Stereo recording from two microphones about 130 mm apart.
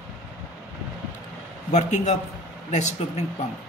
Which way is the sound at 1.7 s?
65° left (ahead or behind).